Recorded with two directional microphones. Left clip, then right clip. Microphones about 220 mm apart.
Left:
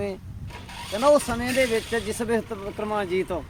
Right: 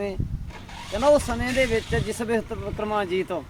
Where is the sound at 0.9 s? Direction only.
5° left (ahead or behind).